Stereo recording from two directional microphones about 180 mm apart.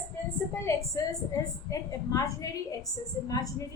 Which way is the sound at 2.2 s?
20° left (ahead or behind).